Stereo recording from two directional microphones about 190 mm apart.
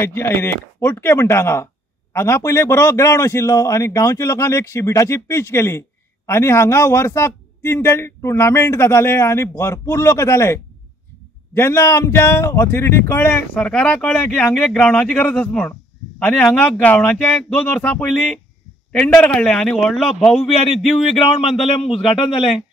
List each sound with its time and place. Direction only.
0.0 s a man's voice: 10° left (ahead or behind)
20.4 s a man's voice: 30° left (ahead or behind)
20.8 s speech: centre (ahead or behind)